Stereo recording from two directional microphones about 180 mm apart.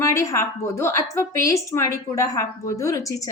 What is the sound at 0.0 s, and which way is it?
A woman's voice, 15° left (ahead or behind).